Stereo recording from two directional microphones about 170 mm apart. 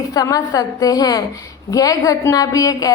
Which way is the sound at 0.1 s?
20° left (ahead or behind).